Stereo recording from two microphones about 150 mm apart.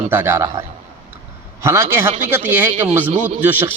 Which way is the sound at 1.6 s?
15° right (ahead or behind).